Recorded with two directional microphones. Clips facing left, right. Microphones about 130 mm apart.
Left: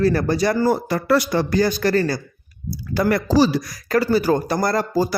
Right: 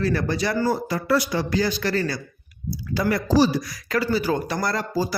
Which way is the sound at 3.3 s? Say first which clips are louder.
Left 1 dB; 90° left.